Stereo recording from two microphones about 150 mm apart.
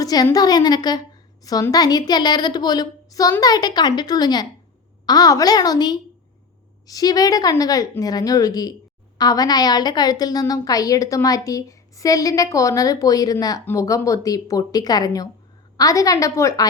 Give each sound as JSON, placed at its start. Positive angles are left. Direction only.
{"t": 0.0, "sound": "a woman's voice", "side_deg": 25}